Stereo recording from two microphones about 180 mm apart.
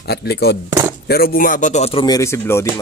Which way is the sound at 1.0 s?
60° left (ahead or behind).